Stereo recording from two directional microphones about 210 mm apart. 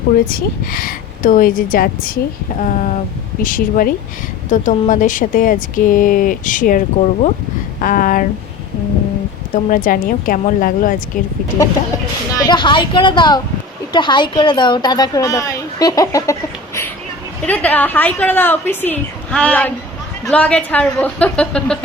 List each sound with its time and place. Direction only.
0.3 s speech: 45° left (ahead or behind)
9.6 s speech: 40° left (ahead or behind)
12.4 s a woman's voice: 20° left (ahead or behind); by 21.8 s 5° left (ahead or behind)